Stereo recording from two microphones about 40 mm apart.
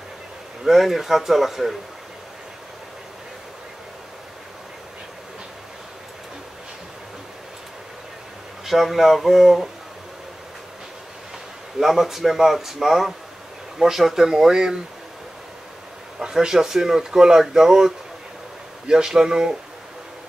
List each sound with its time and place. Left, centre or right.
0.7 s speech: centre
8.6 s speech: centre
11.8 s speech: centre
16.2 s speech: centre